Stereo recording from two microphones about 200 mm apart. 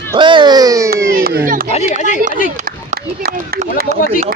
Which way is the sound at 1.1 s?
50° right (ahead or behind).